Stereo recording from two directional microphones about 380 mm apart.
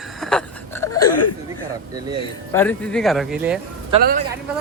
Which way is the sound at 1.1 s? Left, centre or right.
Left.